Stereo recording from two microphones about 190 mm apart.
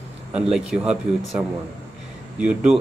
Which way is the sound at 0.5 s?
5° right (ahead or behind).